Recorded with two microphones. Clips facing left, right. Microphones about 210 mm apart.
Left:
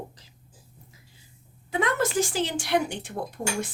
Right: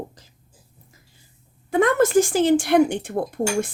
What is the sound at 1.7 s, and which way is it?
A woman's voice, 50° right (ahead or behind).